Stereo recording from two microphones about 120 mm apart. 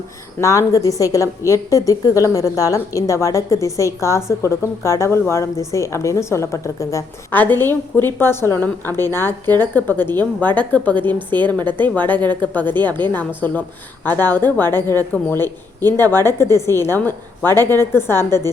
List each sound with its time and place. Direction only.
0.3 s a woman's voice: 25° left (ahead or behind)